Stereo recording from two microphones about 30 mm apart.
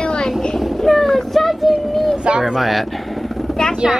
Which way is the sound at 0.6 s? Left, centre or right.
Centre.